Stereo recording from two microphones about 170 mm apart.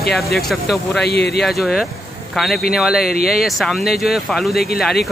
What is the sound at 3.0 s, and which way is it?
Speech, 60° left (ahead or behind).